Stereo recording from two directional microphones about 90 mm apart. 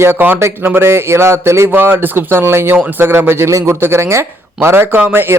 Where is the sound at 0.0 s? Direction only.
25° right (ahead or behind).